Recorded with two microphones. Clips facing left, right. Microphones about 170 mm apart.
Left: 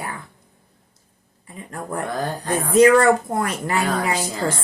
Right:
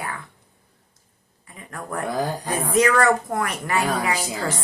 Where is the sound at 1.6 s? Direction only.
30° left (ahead or behind).